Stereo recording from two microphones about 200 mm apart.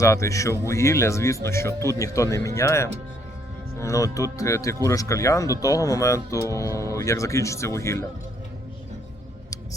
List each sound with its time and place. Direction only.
0.0 s speech: 15° left (ahead or behind)